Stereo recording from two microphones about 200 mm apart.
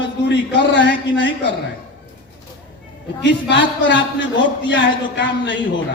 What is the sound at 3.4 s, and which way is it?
A man's voice, 65° left (ahead or behind).